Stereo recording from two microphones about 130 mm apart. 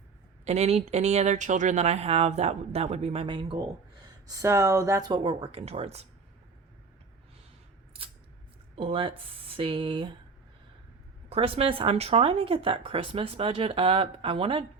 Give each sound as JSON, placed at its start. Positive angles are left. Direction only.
{"t": 0.4, "sound": "speech", "side_deg": -55}
{"t": 4.3, "sound": "speech", "side_deg": -25}
{"t": 8.7, "sound": "speech", "side_deg": -45}
{"t": 11.3, "sound": "speech", "side_deg": -50}